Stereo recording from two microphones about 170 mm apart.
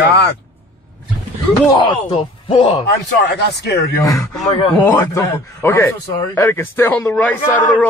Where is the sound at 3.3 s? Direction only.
80° left.